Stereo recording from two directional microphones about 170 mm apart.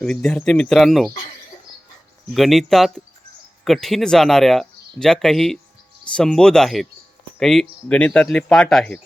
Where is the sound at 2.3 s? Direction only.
Centre (ahead or behind).